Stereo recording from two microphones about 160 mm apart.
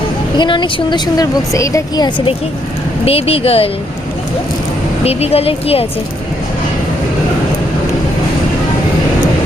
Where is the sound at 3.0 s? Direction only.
35° left (ahead or behind).